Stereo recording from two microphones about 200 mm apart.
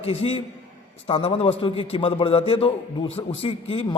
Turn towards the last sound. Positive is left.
turn(degrees=25)  # may be behind; listen again after turning